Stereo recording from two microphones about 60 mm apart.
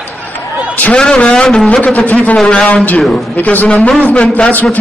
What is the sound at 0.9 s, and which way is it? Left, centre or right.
Speech, centre.